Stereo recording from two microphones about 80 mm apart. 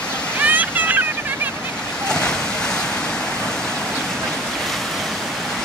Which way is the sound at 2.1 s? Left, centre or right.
Centre.